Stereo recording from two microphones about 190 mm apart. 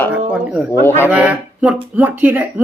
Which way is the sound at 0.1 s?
5° right (ahead or behind).